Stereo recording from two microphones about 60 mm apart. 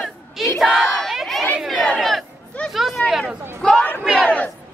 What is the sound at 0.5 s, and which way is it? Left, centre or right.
Crowd, centre.